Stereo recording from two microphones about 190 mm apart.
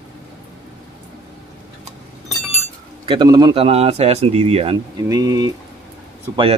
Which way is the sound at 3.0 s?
25° right (ahead or behind).